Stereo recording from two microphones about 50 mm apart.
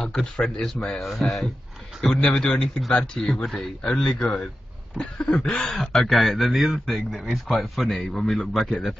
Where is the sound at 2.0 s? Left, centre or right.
Left.